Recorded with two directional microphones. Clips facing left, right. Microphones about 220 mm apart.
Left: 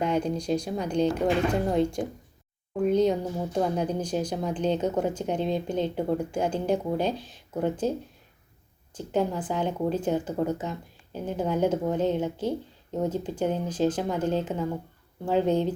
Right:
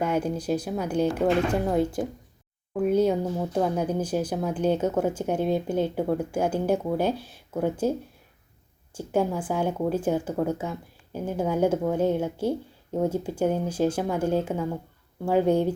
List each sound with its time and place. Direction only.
0.0 s a woman's voice: 5° right (ahead or behind)